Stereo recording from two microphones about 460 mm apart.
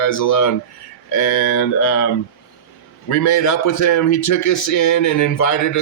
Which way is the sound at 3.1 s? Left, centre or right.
Left.